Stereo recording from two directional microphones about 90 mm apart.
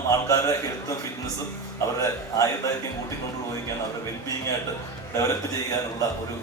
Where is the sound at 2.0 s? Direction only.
35° left (ahead or behind).